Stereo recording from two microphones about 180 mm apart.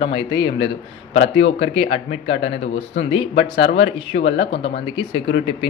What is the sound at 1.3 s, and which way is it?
Speech, 35° left (ahead or behind).